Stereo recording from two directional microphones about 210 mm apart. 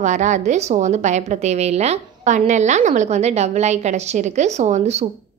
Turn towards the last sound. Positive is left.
turn(degrees=-30)  # may be behind; listen again after turning